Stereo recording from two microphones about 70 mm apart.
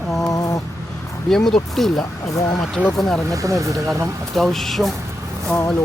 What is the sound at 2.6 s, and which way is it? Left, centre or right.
Speech, centre.